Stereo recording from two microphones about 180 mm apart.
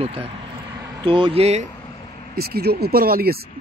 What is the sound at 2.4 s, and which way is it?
Speech, 60° right (ahead or behind).